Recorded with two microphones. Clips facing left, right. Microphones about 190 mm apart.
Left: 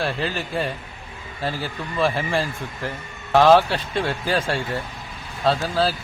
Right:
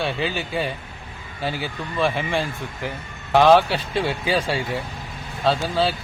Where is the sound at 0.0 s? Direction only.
Centre (ahead or behind).